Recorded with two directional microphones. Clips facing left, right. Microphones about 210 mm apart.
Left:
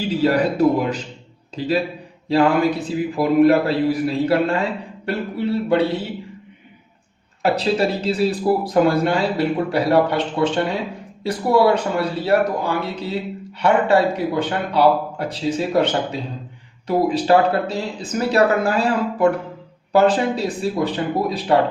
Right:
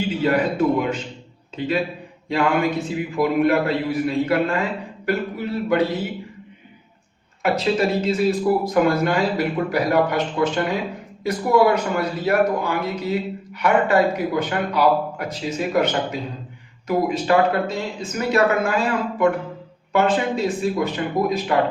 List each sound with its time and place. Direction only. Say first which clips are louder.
0.2 s a man's voice: left 3 dB; 35° left (ahead or behind)
7.4 s speech: left 1 dB; 35° left (ahead or behind)